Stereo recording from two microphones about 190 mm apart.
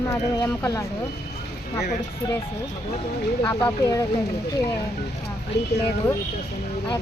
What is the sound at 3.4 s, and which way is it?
Speech, 15° left (ahead or behind).